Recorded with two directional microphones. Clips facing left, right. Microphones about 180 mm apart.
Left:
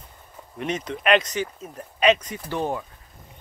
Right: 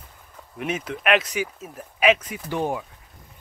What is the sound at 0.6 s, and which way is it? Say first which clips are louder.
Speech: even; 5° right (ahead or behind).